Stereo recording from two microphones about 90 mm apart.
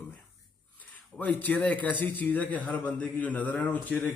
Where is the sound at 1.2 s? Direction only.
20° left (ahead or behind).